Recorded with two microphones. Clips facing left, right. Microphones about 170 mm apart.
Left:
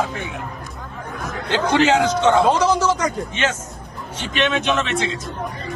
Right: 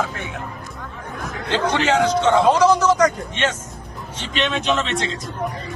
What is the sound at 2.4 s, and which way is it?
Speech, 30° left (ahead or behind).